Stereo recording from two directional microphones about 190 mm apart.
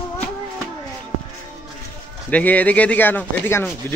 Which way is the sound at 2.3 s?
10° left (ahead or behind).